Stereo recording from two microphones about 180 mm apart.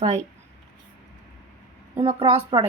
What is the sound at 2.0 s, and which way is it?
Speech, 30° right (ahead or behind).